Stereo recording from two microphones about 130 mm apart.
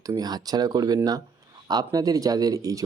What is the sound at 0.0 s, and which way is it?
Speech, 30° right (ahead or behind).